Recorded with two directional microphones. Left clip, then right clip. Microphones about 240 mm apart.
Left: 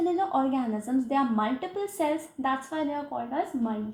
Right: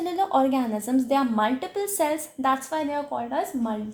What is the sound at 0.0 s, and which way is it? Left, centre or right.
A woman's voice, right.